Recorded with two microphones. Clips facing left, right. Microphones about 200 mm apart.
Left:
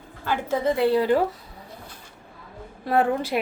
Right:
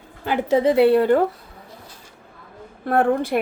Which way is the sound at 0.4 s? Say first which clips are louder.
Right 7 dB; 75° right (ahead or behind).